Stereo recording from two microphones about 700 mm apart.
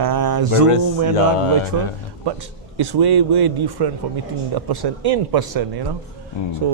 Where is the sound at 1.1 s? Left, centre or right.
Left.